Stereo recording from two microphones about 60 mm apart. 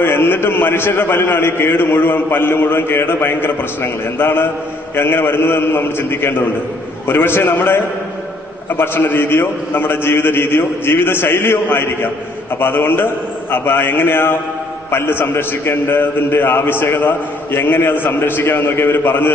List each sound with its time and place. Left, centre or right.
0.0 s a man's voice: left